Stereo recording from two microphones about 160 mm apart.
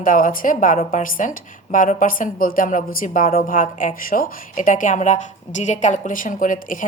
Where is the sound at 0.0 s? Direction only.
60° left (ahead or behind).